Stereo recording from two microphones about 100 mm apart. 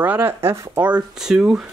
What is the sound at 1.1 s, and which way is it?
Speech, 5° right (ahead or behind).